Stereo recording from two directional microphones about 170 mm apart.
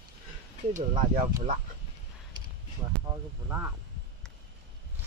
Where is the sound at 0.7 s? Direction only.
45° right (ahead or behind).